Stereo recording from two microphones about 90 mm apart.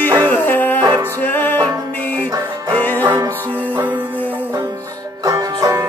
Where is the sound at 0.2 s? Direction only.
20° left (ahead or behind).